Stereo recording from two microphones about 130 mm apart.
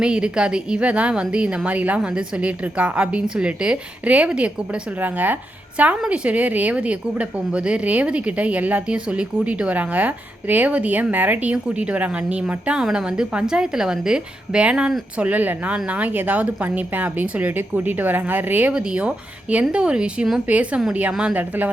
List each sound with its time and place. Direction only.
0.0 s a woman's voice: 5° right (ahead or behind)